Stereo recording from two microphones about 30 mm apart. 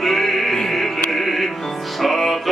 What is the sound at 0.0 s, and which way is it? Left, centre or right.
Music, centre.